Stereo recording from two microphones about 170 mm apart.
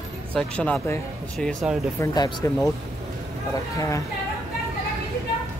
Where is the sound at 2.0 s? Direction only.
20° left (ahead or behind).